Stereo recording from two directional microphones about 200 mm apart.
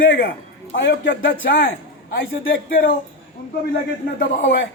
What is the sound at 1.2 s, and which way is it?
Speech, 45° left (ahead or behind).